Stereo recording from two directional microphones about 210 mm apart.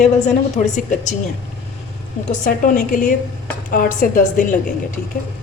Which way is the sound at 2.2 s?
40° left (ahead or behind).